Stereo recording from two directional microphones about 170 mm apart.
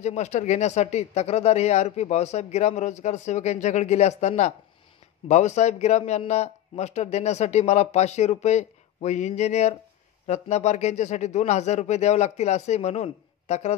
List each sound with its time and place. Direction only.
0.0 s speech: 40° left (ahead or behind)